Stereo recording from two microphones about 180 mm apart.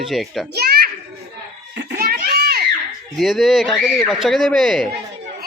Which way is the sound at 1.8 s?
65° right (ahead or behind).